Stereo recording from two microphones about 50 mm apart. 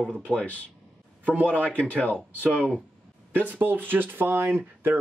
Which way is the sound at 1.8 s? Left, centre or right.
Left.